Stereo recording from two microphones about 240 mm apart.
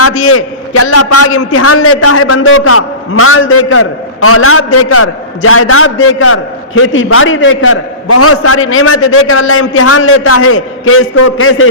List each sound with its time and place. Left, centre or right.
0.0 s a man's voice: left